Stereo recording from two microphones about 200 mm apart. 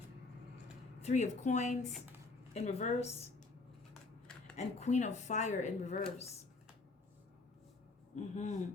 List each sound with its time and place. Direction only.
1.0 s speech: 35° left (ahead or behind)
4.5 s speech: 35° left (ahead or behind)
8.1 s speech: 35° left (ahead or behind)